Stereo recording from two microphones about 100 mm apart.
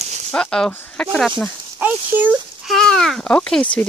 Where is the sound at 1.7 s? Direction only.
15° right (ahead or behind).